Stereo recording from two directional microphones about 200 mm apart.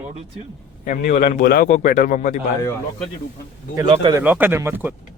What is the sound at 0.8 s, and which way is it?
A man's voice, 40° left (ahead or behind).